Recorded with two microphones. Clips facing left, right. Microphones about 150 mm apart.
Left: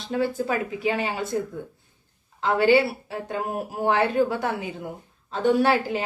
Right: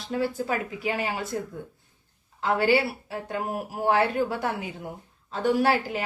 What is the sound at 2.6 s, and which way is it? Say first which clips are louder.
A woman's voice: left 5 dB; 25° left (ahead or behind).